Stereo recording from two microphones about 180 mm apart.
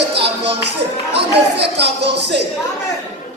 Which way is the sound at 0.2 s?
70° right (ahead or behind).